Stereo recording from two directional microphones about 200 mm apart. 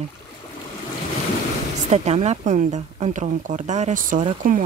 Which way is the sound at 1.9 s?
35° right (ahead or behind).